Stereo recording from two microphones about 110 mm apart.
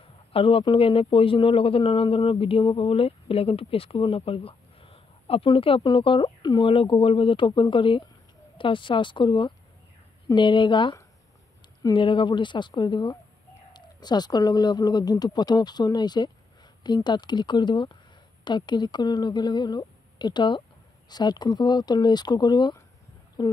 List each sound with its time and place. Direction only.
0.3 s speech: 55° left (ahead or behind); by 23.5 s 40° left (ahead or behind)